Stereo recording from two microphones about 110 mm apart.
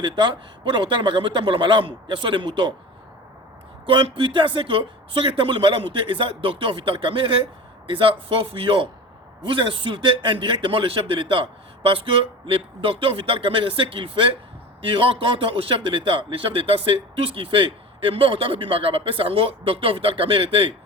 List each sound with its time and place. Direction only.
0.0 s a man's voice: 45° right (ahead or behind)
3.8 s a man's voice: 50° right (ahead or behind)